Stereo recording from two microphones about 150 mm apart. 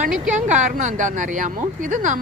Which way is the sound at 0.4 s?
55° right (ahead or behind).